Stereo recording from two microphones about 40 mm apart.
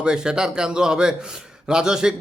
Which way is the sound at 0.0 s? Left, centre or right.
Centre.